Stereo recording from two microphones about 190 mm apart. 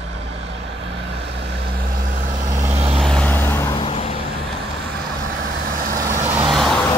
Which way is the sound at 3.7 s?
30° left (ahead or behind).